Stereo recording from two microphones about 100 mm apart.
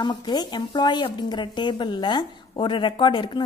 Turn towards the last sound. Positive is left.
turn(degrees=50)  # may be behind; listen again after turning